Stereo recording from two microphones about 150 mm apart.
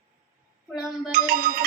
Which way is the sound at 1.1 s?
70° right (ahead or behind).